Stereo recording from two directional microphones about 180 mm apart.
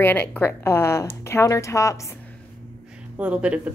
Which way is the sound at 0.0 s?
10° left (ahead or behind).